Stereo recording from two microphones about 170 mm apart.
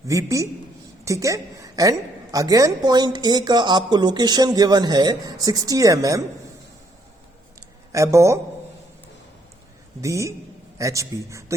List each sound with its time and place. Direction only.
0.1 s a woman's voice: 20° right (ahead or behind)
7.9 s a man's voice: 15° right (ahead or behind)
10.0 s a woman's voice: 20° right (ahead or behind)